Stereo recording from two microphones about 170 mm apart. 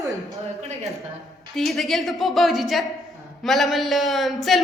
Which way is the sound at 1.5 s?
Centre (ahead or behind).